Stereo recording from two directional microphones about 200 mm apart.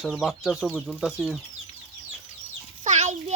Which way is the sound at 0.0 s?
Centre (ahead or behind).